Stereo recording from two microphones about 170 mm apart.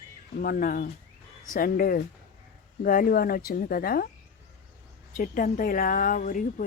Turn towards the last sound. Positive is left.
turn(degrees=55)  # may be behind; listen again after turning